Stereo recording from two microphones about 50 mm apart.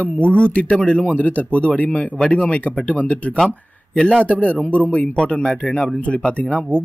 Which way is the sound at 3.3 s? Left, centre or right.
Centre.